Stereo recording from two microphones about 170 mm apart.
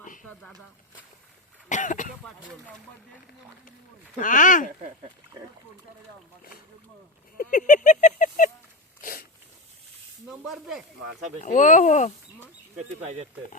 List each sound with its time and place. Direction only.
0.2 s speech: 5° left (ahead or behind)
1.7 s speech: 50° left (ahead or behind)
2.2 s speech: 5° left (ahead or behind)
4.2 s speech: 50° left (ahead or behind)
7.3 s a sound: 50° left (ahead or behind)
10.5 s speech: centre (ahead or behind)
11.3 s speech: 45° left (ahead or behind)
13.0 s speech: 40° right (ahead or behind)